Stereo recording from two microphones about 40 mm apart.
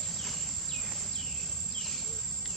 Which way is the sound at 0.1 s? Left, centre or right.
Centre.